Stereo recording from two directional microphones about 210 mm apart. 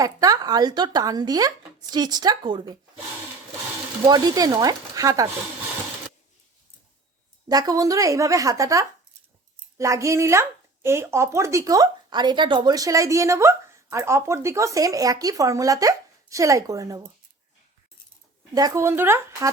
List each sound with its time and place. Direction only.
0.0 s speech: 15° right (ahead or behind)
4.0 s speech: 15° right (ahead or behind)
7.4 s speech: 20° right (ahead or behind)
18.5 s speech: 15° right (ahead or behind)